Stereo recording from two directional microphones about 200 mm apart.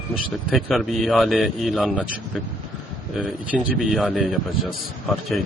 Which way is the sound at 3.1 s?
Centre (ahead or behind).